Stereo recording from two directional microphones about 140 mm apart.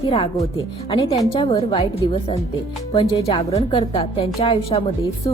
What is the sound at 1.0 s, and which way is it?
Speech, 25° left (ahead or behind).